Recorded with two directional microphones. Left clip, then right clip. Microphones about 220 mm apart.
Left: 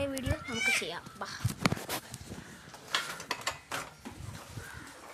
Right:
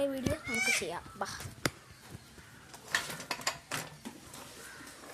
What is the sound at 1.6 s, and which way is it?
Dog, 5° right (ahead or behind).